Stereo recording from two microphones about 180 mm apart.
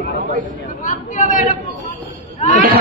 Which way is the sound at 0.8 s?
45° left (ahead or behind).